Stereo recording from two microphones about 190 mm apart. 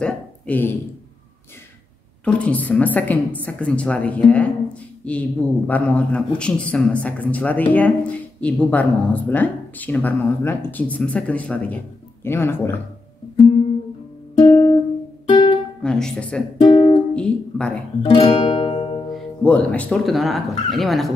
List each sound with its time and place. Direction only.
0.0 s a man's voice: 10° left (ahead or behind)
2.2 s a man's voice: 5° left (ahead or behind)
14.4 s music: 25° left (ahead or behind)
15.8 s speech: 5° left (ahead or behind)
16.6 s music: 30° left (ahead or behind)
17.1 s speech: 5° left (ahead or behind)
18.1 s music: 30° left (ahead or behind)
19.1 s speech: 5° left (ahead or behind)